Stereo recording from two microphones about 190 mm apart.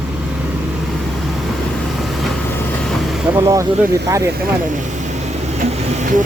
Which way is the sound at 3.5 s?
15° right (ahead or behind).